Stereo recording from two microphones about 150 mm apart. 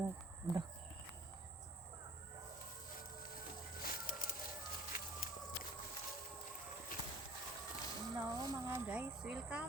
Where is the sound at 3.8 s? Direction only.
75° left (ahead or behind).